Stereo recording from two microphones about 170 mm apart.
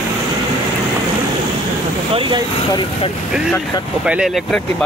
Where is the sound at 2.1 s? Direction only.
30° right (ahead or behind).